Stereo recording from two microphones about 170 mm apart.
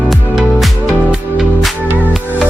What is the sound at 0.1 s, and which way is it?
Music, centre (ahead or behind).